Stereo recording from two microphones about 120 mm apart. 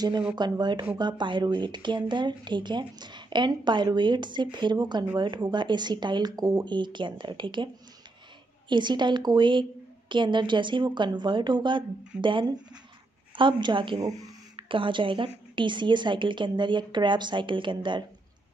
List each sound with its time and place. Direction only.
0.4 s a woman's voice: 40° right (ahead or behind)